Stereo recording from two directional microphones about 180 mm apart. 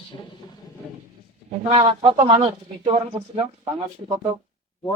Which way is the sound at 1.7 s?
30° right (ahead or behind).